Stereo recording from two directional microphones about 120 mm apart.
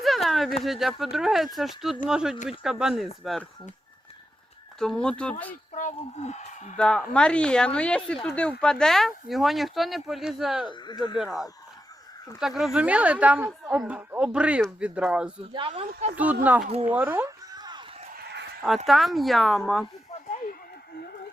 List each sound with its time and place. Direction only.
0.0 s a sound: centre (ahead or behind)
0.6 s speech: centre (ahead or behind)
4.8 s speech: 5° left (ahead or behind)
5.7 s speech: 80° left
6.7 s speech: 5° left (ahead or behind)
10.7 s speech: 35° left (ahead or behind)
11.2 s a woman's voice: centre (ahead or behind)
16.6 s speech: 55° right (ahead or behind)
16.9 s a woman's voice: 15° right (ahead or behind)
17.2 s a sound: 35° right (ahead or behind)
18.9 s speech: centre (ahead or behind)